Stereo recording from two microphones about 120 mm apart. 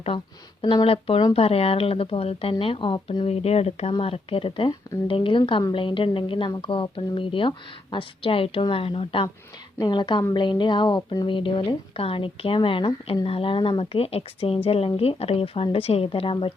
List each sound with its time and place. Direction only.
0.6 s speech: 45° left (ahead or behind)
9.7 s a woman's voice: 40° left (ahead or behind)